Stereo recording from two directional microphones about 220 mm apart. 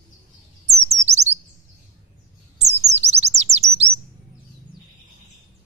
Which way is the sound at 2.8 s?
30° right (ahead or behind).